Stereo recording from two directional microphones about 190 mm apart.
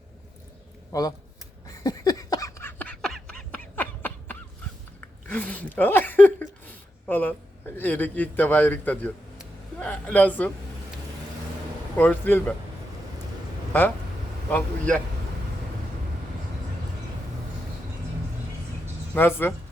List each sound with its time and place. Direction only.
0.9 s speech: 20° left (ahead or behind)
1.6 s a sound: 20° left (ahead or behind)
4.9 s a man's voice: 10° left (ahead or behind)
9.4 s a sound: 5° left (ahead or behind)
11.9 s a man's voice: 10° left (ahead or behind)
14.5 s a man's voice: 5° left (ahead or behind)
19.1 s speech: 10° left (ahead or behind)